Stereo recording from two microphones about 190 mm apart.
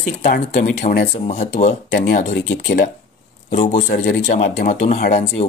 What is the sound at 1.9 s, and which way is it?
Speech, 60° left (ahead or behind).